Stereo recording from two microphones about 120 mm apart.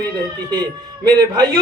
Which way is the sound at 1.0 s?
35° right (ahead or behind).